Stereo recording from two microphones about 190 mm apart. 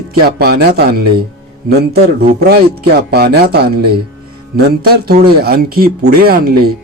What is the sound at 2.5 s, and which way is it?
A man's voice, 55° right (ahead or behind).